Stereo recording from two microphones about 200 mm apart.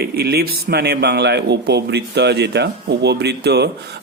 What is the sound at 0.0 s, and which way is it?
A man's voice, 55° right (ahead or behind).